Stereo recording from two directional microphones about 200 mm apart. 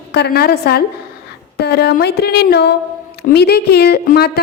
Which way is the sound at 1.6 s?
55° left (ahead or behind).